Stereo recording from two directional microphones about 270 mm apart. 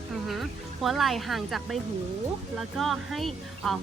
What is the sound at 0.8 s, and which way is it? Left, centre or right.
Speech, centre.